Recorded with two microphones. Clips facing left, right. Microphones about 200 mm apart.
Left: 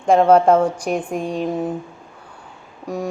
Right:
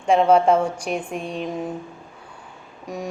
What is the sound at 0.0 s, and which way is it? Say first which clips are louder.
A woman's voice: left 3 dB; 40° left (ahead or behind).